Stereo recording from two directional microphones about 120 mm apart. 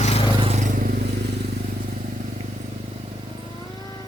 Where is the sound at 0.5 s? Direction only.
90° right.